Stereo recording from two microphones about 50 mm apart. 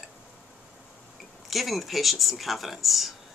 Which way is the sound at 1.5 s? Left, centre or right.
Centre.